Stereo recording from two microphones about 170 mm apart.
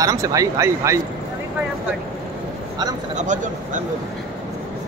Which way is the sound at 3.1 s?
45° right (ahead or behind).